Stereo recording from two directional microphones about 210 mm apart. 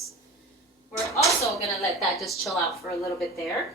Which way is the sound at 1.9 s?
Centre (ahead or behind).